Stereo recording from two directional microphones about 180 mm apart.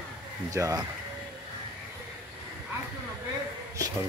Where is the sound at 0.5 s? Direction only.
20° right (ahead or behind).